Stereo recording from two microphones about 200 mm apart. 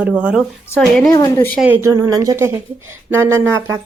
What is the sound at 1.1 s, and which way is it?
Speech, 15° left (ahead or behind).